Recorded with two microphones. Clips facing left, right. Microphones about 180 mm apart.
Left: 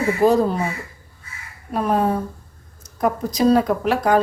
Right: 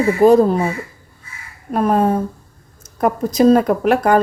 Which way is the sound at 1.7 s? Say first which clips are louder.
Right 4 dB; 50° right (ahead or behind).